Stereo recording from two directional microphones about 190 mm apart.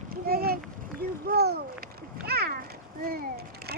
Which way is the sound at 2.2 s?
55° right (ahead or behind).